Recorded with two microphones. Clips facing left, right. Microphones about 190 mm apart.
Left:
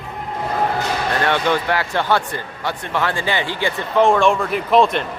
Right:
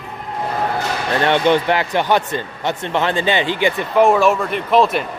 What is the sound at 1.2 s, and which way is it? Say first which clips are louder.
Speech: right 6 dB; 20° right (ahead or behind).